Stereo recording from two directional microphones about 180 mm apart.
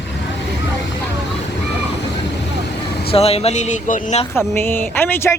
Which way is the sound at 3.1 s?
35° left (ahead or behind).